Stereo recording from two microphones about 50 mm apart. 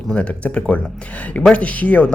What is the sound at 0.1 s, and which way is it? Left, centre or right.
Speech, left.